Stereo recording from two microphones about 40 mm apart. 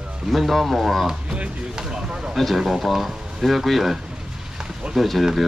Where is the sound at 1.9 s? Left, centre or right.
Right.